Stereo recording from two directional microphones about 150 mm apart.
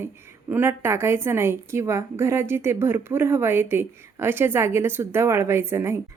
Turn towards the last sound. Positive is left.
turn(degrees=-15)  # may be behind; listen again after turning